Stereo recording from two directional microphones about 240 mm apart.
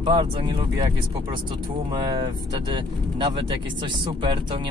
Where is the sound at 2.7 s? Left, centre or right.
Centre.